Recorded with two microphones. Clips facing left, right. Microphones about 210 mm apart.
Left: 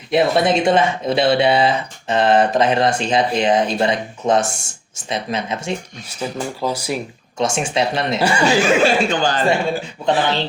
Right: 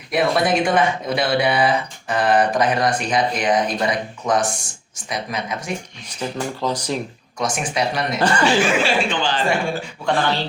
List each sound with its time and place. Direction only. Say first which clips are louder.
0.1 s speech: left 3 dB; 25° left (ahead or behind)
6.3 s speech: even; 10° left (ahead or behind)
7.3 s speech: left 4 dB; 25° left (ahead or behind)
8.2 s speech: even; 10° left (ahead or behind)
8.4 s speech: left 6 dB; 40° left (ahead or behind)
9.5 s speech: left 3 dB; 20° left (ahead or behind)